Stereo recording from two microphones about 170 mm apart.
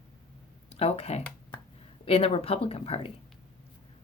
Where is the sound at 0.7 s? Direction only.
35° left (ahead or behind).